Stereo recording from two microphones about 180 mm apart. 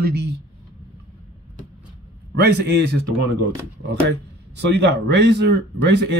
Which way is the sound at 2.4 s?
70° right (ahead or behind).